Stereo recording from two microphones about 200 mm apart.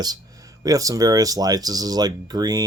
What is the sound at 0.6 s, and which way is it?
Speech, 15° right (ahead or behind).